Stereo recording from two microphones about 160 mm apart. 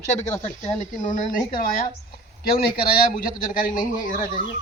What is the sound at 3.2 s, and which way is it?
Speech, 55° left (ahead or behind).